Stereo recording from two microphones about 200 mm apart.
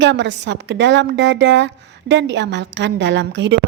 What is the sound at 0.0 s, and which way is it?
A woman's voice, 60° right (ahead or behind).